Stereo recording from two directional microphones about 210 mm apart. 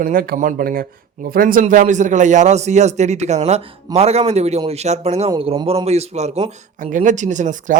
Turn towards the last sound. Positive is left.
turn(degrees=-35)  # may be behind; listen again after turning